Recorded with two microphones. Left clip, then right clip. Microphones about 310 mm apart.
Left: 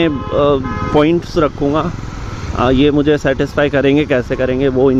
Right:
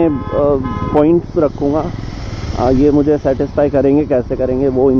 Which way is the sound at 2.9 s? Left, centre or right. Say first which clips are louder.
Right 1 dB; left.